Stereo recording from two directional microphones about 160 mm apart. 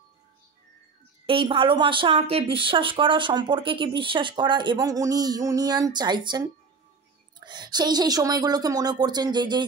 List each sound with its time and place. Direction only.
1.2 s a woman's voice: 35° right (ahead or behind)